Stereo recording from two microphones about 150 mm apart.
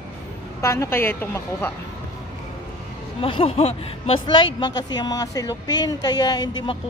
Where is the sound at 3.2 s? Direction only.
35° left (ahead or behind).